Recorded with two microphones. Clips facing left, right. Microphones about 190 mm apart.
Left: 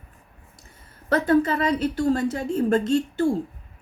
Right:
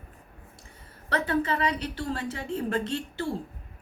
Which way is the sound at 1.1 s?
40° left (ahead or behind).